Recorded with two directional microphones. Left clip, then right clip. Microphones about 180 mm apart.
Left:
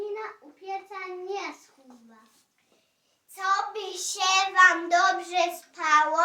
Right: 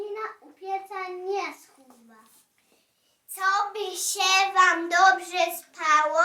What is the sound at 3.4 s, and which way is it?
Child singing, 20° right (ahead or behind).